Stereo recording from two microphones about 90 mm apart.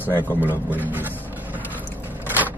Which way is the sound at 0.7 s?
20° right (ahead or behind).